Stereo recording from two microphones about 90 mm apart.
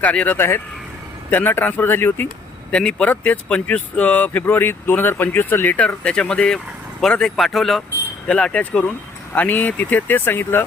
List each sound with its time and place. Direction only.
0.0 s speech: 15° left (ahead or behind)
2.7 s speech: 15° left (ahead or behind)
8.3 s speech: 10° left (ahead or behind)